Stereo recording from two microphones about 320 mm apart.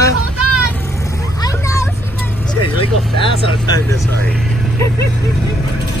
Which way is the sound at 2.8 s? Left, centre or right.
Centre.